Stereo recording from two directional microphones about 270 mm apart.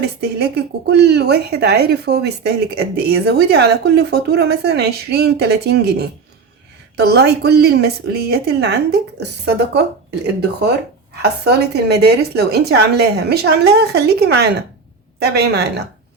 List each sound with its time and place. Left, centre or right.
0.2 s speech: right
11.2 s speech: right